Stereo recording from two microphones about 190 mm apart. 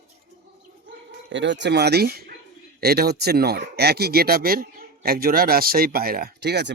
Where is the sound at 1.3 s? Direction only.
70° right (ahead or behind).